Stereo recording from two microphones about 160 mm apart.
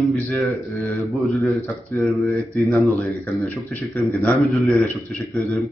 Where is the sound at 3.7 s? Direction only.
10° left (ahead or behind).